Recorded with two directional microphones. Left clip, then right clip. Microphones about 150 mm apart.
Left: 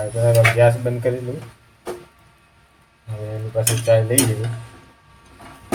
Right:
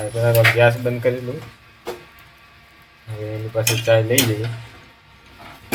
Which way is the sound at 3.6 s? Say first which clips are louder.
Even; 10° left (ahead or behind).